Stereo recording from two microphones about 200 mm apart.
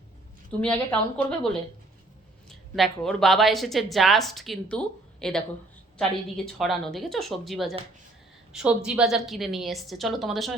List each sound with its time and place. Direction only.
0.6 s a woman's voice: 5° left (ahead or behind)
2.5 s a woman's voice: centre (ahead or behind)